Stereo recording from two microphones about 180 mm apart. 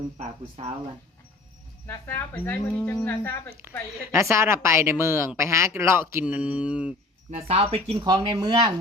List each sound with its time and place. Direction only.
0.2 s speech: 35° right (ahead or behind)
1.9 s speech: 15° left (ahead or behind)
4.1 s a woman's voice: 15° right (ahead or behind)
7.3 s speech: 35° right (ahead or behind)